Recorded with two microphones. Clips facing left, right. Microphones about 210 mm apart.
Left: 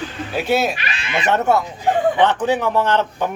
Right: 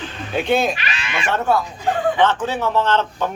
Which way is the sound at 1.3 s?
25° left (ahead or behind).